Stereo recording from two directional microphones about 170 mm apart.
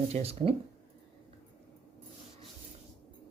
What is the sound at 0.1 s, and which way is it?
Speech, 35° right (ahead or behind).